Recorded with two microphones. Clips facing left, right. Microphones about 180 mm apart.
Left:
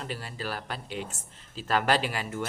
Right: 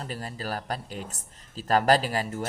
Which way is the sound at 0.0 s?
40° right (ahead or behind).